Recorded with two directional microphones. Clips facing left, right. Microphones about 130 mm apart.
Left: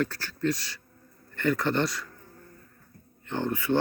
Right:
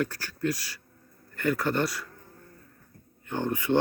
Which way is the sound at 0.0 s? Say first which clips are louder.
Left 1 dB; 10° right (ahead or behind).